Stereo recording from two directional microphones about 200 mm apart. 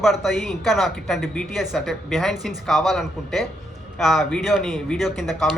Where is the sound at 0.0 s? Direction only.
Centre (ahead or behind).